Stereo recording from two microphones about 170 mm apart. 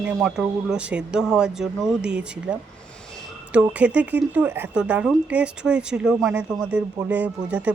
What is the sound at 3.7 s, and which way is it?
Speech, 5° right (ahead or behind).